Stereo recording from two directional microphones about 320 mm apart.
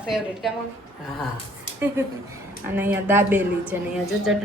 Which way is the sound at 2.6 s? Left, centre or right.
Centre.